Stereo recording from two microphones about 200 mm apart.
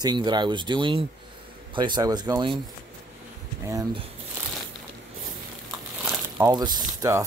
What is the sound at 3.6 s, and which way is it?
Speech, 15° right (ahead or behind).